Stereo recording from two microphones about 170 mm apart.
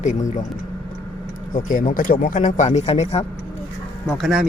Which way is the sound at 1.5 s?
50° left (ahead or behind).